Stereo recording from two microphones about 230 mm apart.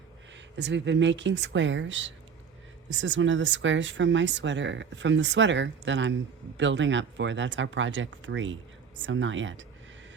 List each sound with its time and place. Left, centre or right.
0.5 s speech: right